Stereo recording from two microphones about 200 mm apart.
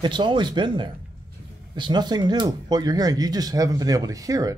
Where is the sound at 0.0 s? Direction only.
20° right (ahead or behind).